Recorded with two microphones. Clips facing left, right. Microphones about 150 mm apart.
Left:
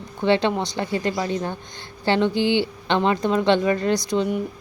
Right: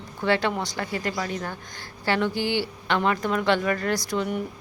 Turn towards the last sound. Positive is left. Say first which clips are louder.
# left 5 dB
turn(degrees=20)  # may be behind; listen again after turning